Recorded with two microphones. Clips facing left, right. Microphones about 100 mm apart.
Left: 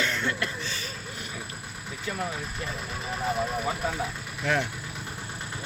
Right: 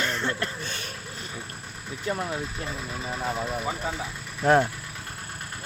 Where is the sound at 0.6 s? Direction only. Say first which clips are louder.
Even; 55° right (ahead or behind).